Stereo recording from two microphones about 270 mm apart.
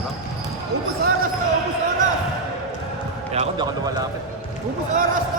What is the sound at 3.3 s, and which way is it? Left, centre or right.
A man's voice, centre.